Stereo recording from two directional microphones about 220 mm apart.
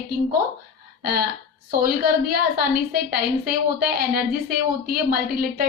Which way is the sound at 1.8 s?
45° right (ahead or behind).